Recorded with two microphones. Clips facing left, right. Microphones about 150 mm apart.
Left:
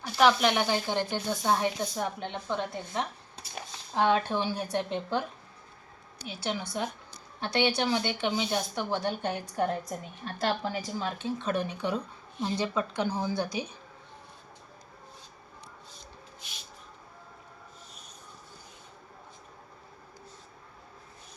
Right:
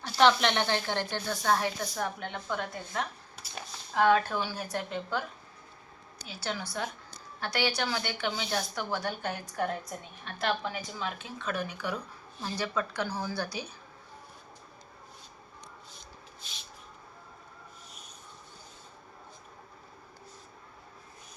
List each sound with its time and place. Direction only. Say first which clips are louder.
0.0 s speech: left 1 dB; 5° left (ahead or behind); by 5.2 s 25° left (ahead or behind)
6.2 s a woman's voice: left 3 dB; 20° left (ahead or behind)